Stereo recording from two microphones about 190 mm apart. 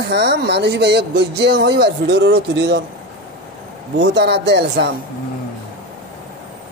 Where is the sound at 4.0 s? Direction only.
60° right (ahead or behind).